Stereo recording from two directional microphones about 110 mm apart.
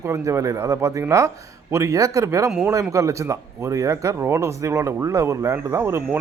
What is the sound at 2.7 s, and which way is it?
Speech, 30° right (ahead or behind).